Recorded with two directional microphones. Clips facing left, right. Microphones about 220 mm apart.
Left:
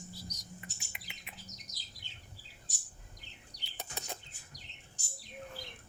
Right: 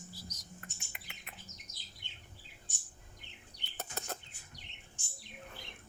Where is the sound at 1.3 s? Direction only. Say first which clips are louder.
Left 2 dB; 40° left (ahead or behind).